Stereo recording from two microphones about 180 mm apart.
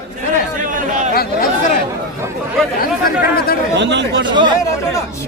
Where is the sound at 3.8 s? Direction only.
80° right.